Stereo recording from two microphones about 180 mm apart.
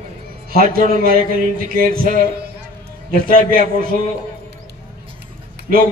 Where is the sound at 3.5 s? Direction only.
50° right (ahead or behind).